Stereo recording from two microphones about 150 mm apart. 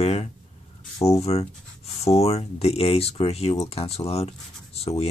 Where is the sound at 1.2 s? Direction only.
45° left (ahead or behind).